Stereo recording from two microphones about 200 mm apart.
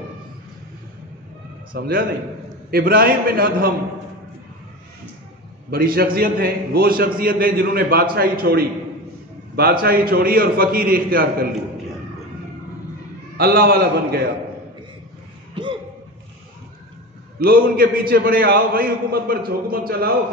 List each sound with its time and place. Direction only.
1.7 s a man's voice: 45° right (ahead or behind)
5.7 s a man's voice: 45° right (ahead or behind)
13.4 s a man's voice: 50° right (ahead or behind)
15.6 s a sound: 25° right (ahead or behind)
17.4 s a man's voice: 45° right (ahead or behind)